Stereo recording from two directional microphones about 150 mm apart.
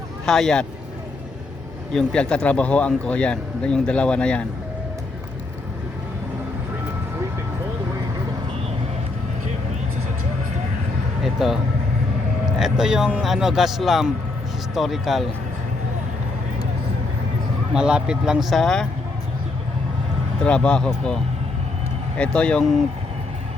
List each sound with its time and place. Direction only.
0.3 s speech: 5° left (ahead or behind)
1.9 s speech: 5° left (ahead or behind)
11.2 s speech: centre (ahead or behind)
12.5 s speech: 5° right (ahead or behind)
17.7 s speech: 5° right (ahead or behind)
20.4 s speech: 5° left (ahead or behind)
22.2 s speech: 5° left (ahead or behind)